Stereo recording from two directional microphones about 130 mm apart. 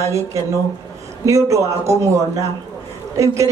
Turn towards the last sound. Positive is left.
turn(degrees=-25)  # may be behind; listen again after turning